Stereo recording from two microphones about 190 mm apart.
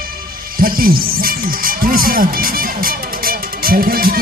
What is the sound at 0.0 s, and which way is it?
Speech, 50° right (ahead or behind).